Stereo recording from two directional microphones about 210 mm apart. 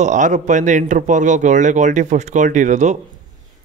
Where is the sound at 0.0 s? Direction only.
35° right (ahead or behind).